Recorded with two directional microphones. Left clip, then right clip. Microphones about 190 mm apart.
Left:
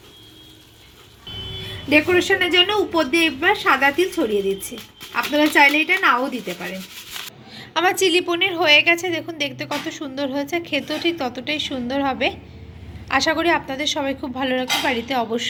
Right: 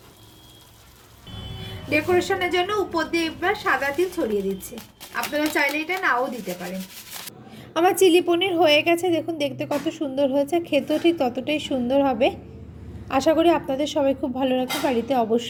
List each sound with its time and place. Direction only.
1.9 s speech: 25° left (ahead or behind)
5.1 s speech: 25° left (ahead or behind)
7.5 s a woman's voice: 40° right (ahead or behind)